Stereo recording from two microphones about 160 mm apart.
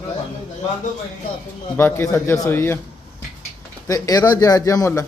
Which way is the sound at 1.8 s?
15° left (ahead or behind).